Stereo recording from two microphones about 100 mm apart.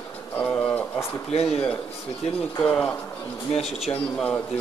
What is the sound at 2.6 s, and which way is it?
Speech, 15° left (ahead or behind).